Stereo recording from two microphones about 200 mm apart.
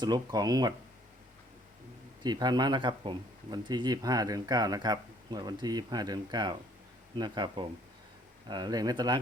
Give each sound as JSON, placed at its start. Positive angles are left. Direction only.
{"t": 0.0, "sound": "speech", "side_deg": -20}
{"t": 2.2, "sound": "speech", "side_deg": -20}